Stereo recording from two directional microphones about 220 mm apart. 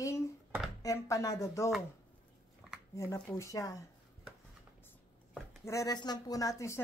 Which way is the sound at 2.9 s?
15° left (ahead or behind).